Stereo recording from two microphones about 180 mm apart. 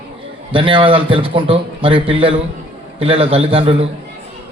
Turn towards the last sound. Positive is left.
turn(degrees=-30)  # may be behind; listen again after turning